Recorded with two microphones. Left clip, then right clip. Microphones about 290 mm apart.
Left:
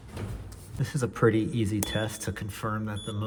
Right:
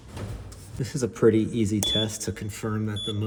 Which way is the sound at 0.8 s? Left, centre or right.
Left.